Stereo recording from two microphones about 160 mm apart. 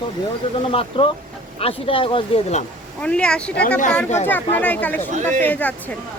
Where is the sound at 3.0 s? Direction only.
5° left (ahead or behind).